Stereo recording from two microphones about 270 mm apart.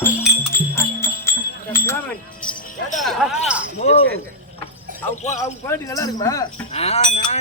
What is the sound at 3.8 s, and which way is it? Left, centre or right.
Speech, left.